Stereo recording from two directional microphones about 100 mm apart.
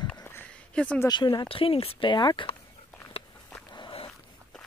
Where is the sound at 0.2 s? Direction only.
25° left (ahead or behind).